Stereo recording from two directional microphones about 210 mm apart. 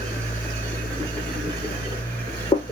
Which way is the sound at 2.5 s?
30° left (ahead or behind).